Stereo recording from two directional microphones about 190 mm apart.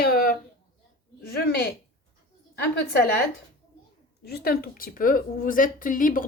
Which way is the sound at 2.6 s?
55° left (ahead or behind).